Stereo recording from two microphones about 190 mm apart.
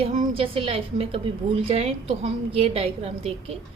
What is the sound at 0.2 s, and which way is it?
A woman's voice, 30° right (ahead or behind).